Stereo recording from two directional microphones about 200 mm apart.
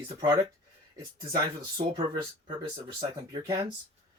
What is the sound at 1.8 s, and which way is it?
Speech, 40° right (ahead or behind).